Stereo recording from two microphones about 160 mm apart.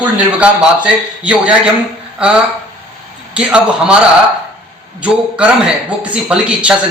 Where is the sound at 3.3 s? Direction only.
5° right (ahead or behind).